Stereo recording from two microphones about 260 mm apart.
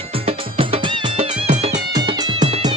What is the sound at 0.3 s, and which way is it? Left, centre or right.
Music, right.